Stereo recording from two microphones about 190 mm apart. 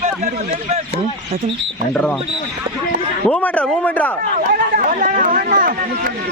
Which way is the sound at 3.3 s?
5° left (ahead or behind).